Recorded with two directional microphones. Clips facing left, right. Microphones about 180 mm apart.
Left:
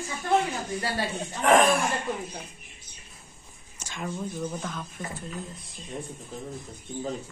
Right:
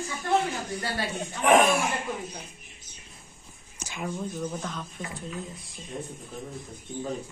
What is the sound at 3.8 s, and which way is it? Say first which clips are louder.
Speech: right 1 dB; 10° right (ahead or behind).